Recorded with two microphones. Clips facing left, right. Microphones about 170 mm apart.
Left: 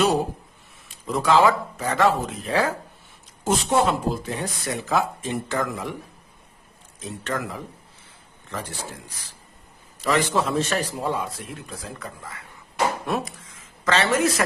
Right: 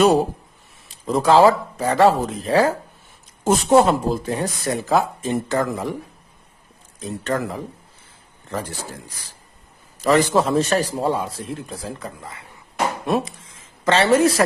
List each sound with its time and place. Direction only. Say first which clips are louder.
0.9 s speech: right 4 dB; 35° right (ahead or behind)
7.3 s speech: right 5 dB; 35° right (ahead or behind)
10.0 s speech: right 5 dB; 40° right (ahead or behind)